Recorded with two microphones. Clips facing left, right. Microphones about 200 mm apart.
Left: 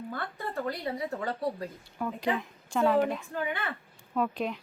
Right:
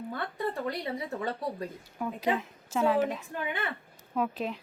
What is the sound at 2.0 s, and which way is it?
Speech, 5° right (ahead or behind).